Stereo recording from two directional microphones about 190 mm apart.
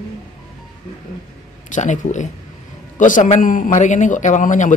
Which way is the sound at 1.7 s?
40° left (ahead or behind).